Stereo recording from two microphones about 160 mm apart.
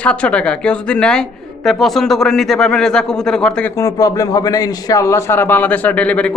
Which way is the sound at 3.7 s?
20° left (ahead or behind).